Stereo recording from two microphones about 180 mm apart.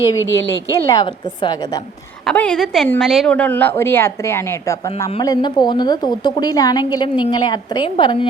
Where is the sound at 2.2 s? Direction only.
5° left (ahead or behind).